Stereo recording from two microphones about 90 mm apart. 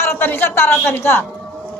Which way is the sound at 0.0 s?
25° left (ahead or behind).